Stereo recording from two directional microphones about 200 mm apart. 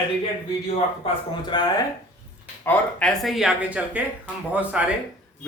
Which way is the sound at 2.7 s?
5° left (ahead or behind).